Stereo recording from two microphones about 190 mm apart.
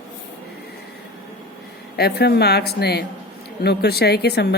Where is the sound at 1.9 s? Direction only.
60° left (ahead or behind).